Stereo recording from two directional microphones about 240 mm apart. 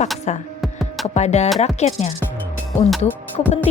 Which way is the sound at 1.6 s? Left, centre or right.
Left.